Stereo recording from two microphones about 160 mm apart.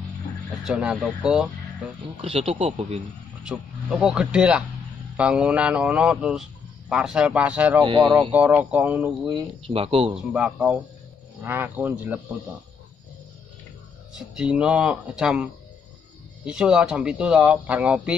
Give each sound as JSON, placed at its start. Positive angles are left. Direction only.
{"t": 0.7, "sound": "speech", "side_deg": -5}
{"t": 2.2, "sound": "speech", "side_deg": -35}
{"t": 3.4, "sound": "speech", "side_deg": -5}
{"t": 7.8, "sound": "speech", "side_deg": -30}
{"t": 8.3, "sound": "speech", "side_deg": -10}
{"t": 9.6, "sound": "speech", "side_deg": -35}
{"t": 10.3, "sound": "speech", "side_deg": -5}
{"t": 14.1, "sound": "speech", "side_deg": -5}